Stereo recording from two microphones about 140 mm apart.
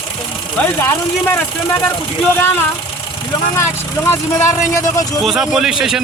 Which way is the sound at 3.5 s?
20° left (ahead or behind).